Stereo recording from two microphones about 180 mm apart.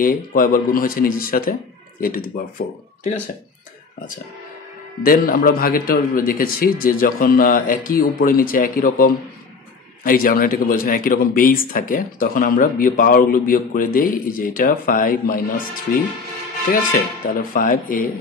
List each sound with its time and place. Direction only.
0.0 s a man's voice: 50° left (ahead or behind)
5.0 s a man's voice: 55° left (ahead or behind)
16.7 s a man's voice: 50° left (ahead or behind)